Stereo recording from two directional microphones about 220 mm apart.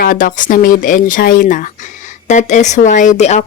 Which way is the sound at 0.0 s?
40° left (ahead or behind).